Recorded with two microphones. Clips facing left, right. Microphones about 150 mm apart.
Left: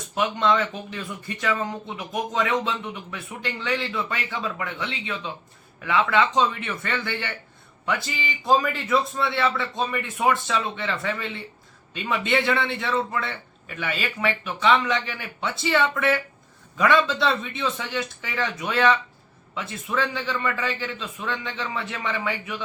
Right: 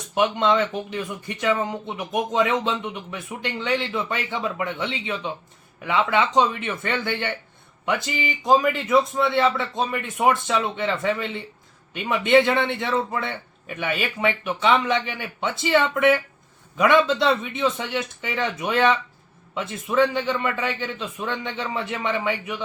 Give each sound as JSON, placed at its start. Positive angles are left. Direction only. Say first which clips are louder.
{"t": 0.1, "sound": "speech", "louder": "right 2 dB", "side_deg": -20}